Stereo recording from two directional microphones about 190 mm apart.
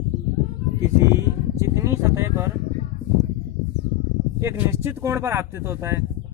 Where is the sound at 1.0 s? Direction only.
15° right (ahead or behind).